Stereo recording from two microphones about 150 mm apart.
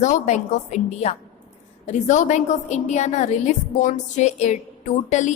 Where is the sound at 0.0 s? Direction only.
55° left (ahead or behind).